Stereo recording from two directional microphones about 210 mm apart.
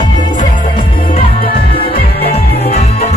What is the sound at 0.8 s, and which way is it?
Music, 25° left (ahead or behind).